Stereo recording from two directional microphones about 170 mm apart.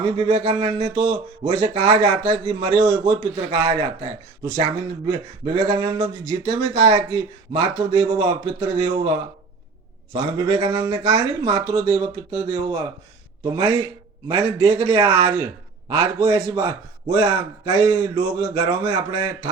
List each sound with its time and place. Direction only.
0.0 s speech: 30° right (ahead or behind)
10.1 s speech: 25° right (ahead or behind)